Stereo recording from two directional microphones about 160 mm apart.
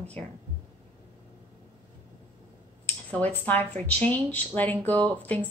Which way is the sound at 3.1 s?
10° left (ahead or behind).